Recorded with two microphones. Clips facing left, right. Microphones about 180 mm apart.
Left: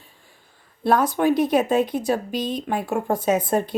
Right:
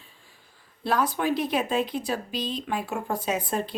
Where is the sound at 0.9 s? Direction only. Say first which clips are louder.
Left 6 dB; 50° left (ahead or behind).